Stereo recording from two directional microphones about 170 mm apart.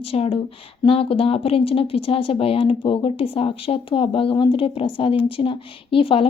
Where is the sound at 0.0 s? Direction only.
35° left (ahead or behind).